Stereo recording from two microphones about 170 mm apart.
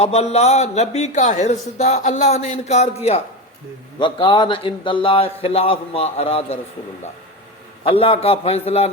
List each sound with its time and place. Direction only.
0.0 s a man's voice: 40° left (ahead or behind)
3.9 s a man's voice: 30° left (ahead or behind)
7.9 s a man's voice: 35° left (ahead or behind)